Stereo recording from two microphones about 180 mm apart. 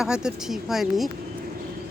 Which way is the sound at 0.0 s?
5° right (ahead or behind).